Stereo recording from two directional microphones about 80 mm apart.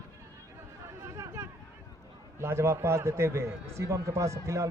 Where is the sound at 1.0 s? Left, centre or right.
Right.